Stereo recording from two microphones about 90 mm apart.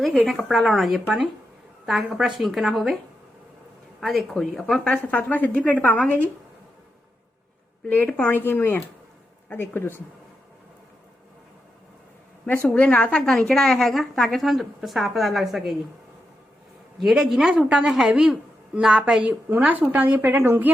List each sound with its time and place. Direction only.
0.0 s a woman's voice: centre (ahead or behind)
4.0 s a woman's voice: centre (ahead or behind)
5.1 s a woman's voice: 20° left (ahead or behind)
7.9 s speech: 15° left (ahead or behind)
12.7 s a woman's voice: 15° left (ahead or behind)
17.0 s a woman's voice: 5° right (ahead or behind); by 20.7 s 25° right (ahead or behind)